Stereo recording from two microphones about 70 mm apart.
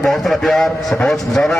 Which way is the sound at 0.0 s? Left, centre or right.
Centre.